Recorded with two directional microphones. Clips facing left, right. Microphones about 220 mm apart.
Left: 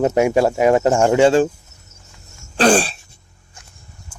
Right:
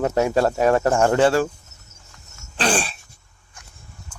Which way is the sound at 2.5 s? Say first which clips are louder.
Left 8 dB; 40° left (ahead or behind).